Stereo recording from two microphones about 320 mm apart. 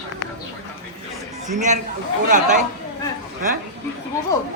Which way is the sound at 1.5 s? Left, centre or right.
Right.